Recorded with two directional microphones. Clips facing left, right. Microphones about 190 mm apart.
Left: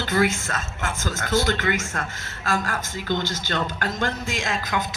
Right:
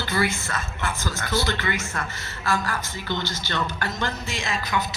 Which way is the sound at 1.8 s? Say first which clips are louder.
Left 1 dB; 90° left.